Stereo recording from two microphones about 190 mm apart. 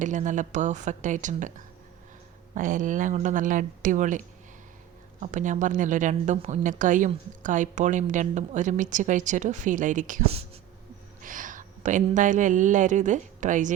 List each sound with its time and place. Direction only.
0.0 s a woman's voice: 40° right (ahead or behind)